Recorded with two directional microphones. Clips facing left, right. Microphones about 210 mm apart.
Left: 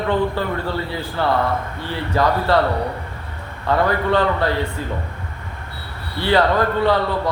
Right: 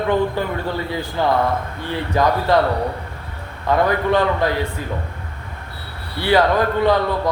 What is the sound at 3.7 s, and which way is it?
Speech, 15° right (ahead or behind).